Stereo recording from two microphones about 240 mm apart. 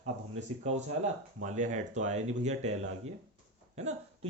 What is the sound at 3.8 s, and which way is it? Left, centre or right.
Speech, right.